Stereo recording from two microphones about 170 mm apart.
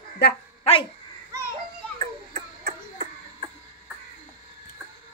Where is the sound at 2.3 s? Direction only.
55° right (ahead or behind).